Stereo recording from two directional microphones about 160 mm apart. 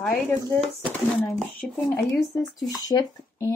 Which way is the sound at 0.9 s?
Centre (ahead or behind).